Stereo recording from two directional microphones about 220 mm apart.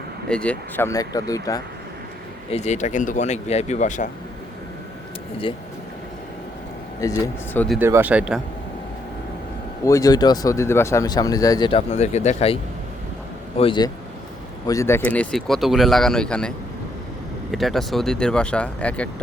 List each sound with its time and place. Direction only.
0.3 s speech: 5° left (ahead or behind)
2.5 s speech: 30° left (ahead or behind)
7.0 s speech: 15° left (ahead or behind)
7.8 s speech: 10° right (ahead or behind)
9.8 s speech: 15° left (ahead or behind)
13.6 s speech: 20° left (ahead or behind); by 16.5 s 5° left (ahead or behind)
17.5 s speech: centre (ahead or behind)